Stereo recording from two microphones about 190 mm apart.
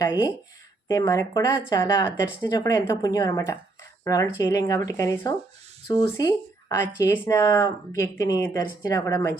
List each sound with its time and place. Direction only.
0.0 s speech: 20° left (ahead or behind)